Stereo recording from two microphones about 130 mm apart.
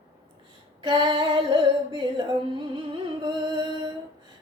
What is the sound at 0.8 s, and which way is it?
Female singing, 35° right (ahead or behind).